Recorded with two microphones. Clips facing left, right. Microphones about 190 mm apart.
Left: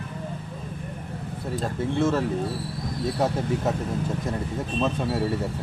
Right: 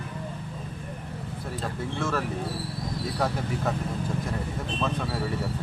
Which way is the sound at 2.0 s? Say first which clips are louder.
Left 6 dB; 20° left (ahead or behind).